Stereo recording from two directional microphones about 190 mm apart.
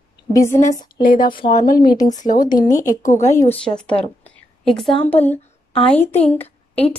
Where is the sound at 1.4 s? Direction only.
20° left (ahead or behind).